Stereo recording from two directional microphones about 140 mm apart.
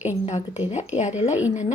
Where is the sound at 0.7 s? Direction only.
50° left (ahead or behind).